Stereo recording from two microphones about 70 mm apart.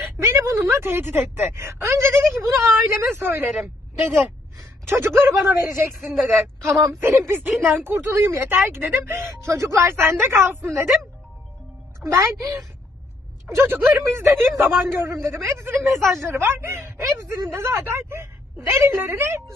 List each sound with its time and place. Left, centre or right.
0.2 s speech: right
3.5 s a woman's voice: centre
4.5 s a man's voice: right
12.0 s a woman's voice: right
13.6 s speech: right
16.0 s a woman's voice: centre
16.2 s speech: right